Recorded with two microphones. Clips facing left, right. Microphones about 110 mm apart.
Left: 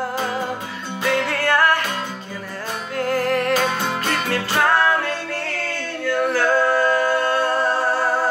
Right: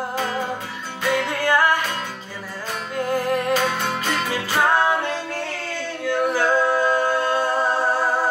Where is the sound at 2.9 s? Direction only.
15° right (ahead or behind).